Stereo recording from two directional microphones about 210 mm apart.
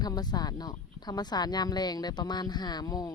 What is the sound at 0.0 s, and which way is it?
Speech, 20° left (ahead or behind).